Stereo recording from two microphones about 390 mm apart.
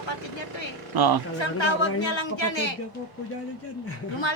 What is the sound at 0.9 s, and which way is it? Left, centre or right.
Speech, right.